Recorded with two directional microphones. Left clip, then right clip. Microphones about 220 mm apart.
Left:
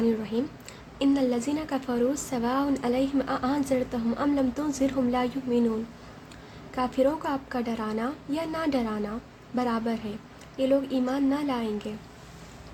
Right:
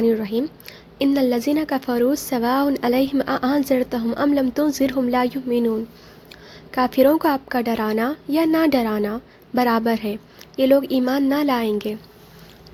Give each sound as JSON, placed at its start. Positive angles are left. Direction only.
{"t": 0.0, "sound": "a sound", "side_deg": -35}
{"t": 0.9, "sound": "a woman's voice", "side_deg": -35}
{"t": 6.7, "sound": "a woman's voice", "side_deg": -35}